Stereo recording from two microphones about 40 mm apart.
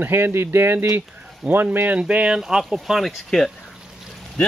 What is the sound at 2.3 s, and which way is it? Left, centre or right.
Speech, centre.